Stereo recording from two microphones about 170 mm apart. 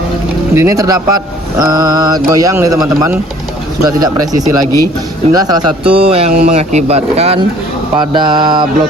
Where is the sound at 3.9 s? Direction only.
20° right (ahead or behind); by 7.4 s 40° right (ahead or behind).